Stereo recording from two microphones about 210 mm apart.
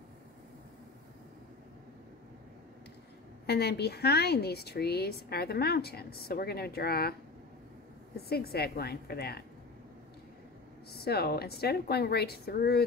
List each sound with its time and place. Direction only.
3.4 s a woman's voice: 50° left (ahead or behind)
8.3 s a woman's voice: 50° left (ahead or behind)
10.9 s a woman's voice: 50° left (ahead or behind)